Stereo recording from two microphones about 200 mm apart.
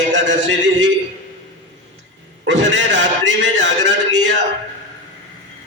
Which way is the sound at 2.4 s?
65° right (ahead or behind).